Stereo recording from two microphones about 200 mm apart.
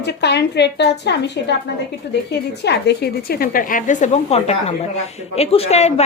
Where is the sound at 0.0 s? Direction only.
55° left (ahead or behind).